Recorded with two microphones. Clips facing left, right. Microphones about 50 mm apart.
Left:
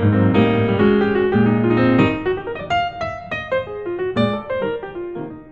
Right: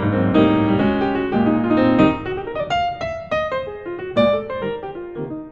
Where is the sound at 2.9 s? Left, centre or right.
Centre.